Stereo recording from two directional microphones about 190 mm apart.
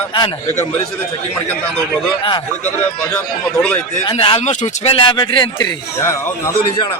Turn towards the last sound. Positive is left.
turn(degrees=15)  # may be behind; listen again after turning